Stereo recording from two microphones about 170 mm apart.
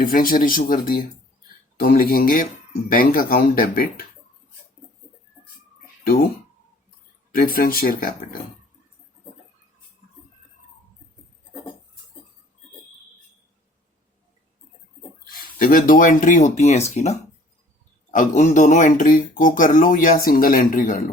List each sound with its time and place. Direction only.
0.0 s speech: 55° left (ahead or behind)
7.3 s speech: 55° left (ahead or behind)
15.2 s speech: 55° left (ahead or behind)